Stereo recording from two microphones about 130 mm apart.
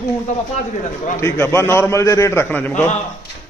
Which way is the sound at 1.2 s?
20° left (ahead or behind).